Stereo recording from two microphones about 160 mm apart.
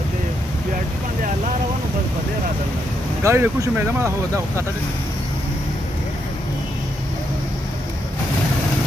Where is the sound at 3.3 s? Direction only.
15° right (ahead or behind).